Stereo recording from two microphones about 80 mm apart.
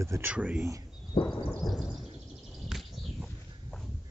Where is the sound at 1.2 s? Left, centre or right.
Left.